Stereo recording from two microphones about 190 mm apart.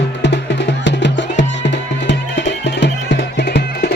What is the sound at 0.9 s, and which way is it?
Music, 70° left (ahead or behind).